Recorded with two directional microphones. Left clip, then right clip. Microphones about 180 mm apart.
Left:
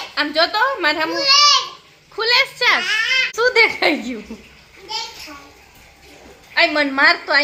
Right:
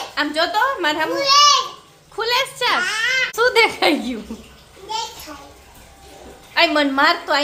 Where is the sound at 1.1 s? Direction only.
15° right (ahead or behind).